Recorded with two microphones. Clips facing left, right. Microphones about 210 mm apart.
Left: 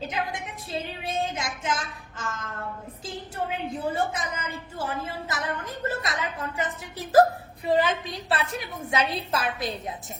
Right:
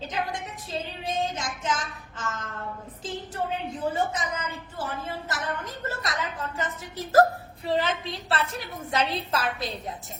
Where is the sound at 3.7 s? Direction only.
10° left (ahead or behind).